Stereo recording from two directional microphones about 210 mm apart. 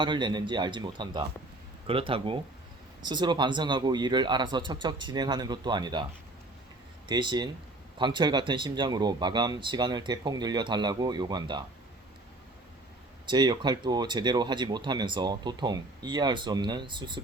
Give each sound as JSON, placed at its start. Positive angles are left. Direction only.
{"t": 0.0, "sound": "speech", "side_deg": -20}
{"t": 7.1, "sound": "speech", "side_deg": -20}
{"t": 13.2, "sound": "speech", "side_deg": -20}